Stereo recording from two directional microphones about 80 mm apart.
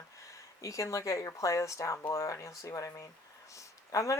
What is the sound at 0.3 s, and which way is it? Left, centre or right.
Speech, left.